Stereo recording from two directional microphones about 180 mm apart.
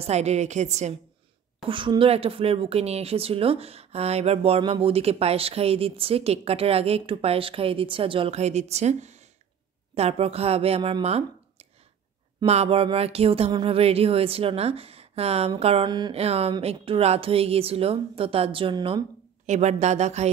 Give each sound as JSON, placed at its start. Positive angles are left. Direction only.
{"t": 0.0, "sound": "speech", "side_deg": -35}
{"t": 1.7, "sound": "speech", "side_deg": -30}
{"t": 19.4, "sound": "speech", "side_deg": -40}